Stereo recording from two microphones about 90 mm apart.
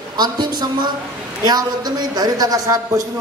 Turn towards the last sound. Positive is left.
turn(degrees=-45)  # may be behind; listen again after turning